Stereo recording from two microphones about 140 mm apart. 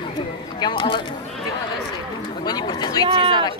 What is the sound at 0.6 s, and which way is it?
Speech, 35° left (ahead or behind).